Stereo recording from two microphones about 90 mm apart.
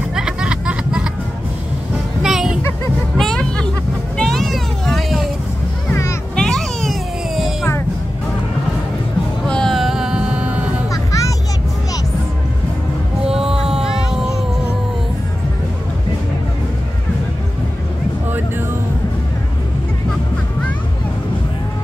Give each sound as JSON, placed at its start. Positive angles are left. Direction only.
{"t": 0.1, "sound": "a sound", "side_deg": -10}
{"t": 2.2, "sound": "music", "side_deg": -5}
{"t": 3.2, "sound": "music", "side_deg": 5}
{"t": 4.2, "sound": "vehicle", "side_deg": 5}
{"t": 6.3, "sound": "cat", "side_deg": 5}
{"t": 9.5, "sound": "music", "side_deg": 5}
{"t": 10.9, "sound": "music", "side_deg": 40}
{"t": 13.3, "sound": "music", "side_deg": -5}